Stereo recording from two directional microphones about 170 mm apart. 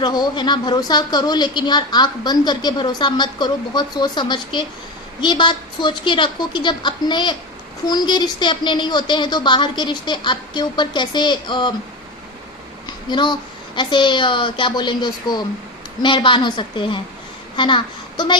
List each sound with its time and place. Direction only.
0.0 s a woman's voice: 25° left (ahead or behind)
13.1 s a woman's voice: 25° left (ahead or behind)